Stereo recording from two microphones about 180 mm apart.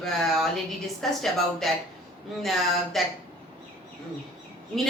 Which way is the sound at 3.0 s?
Centre (ahead or behind).